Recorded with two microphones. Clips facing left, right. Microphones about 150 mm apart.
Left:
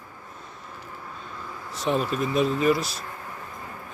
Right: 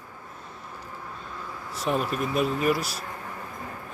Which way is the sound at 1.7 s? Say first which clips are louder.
Left 2 dB; 5° right (ahead or behind).